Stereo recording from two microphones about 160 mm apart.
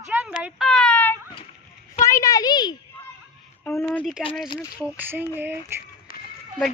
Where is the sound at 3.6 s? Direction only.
10° left (ahead or behind).